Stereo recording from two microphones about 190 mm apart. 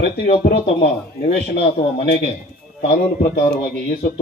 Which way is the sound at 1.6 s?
30° left (ahead or behind).